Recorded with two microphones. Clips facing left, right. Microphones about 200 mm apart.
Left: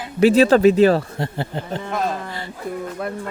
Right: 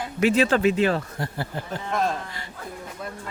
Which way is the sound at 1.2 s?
25° left (ahead or behind).